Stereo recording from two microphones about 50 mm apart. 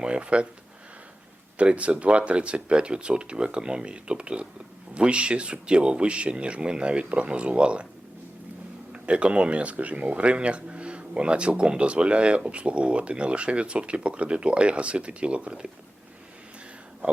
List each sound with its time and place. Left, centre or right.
0.0 s speech: right
1.5 s speech: right
8.9 s speech: right